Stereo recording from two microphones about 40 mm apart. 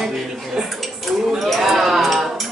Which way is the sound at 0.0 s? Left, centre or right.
Centre.